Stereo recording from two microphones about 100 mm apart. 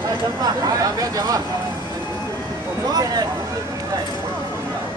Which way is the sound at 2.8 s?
40° right (ahead or behind).